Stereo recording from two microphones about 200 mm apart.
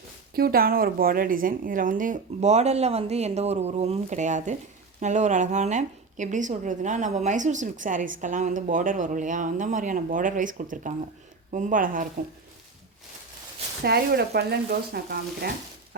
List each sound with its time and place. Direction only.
0.3 s speech: 50° right (ahead or behind)
13.8 s speech: 50° right (ahead or behind)